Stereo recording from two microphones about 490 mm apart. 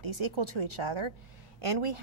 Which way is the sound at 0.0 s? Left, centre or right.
Right.